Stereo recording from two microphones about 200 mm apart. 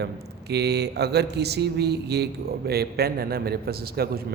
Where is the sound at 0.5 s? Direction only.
55° right (ahead or behind).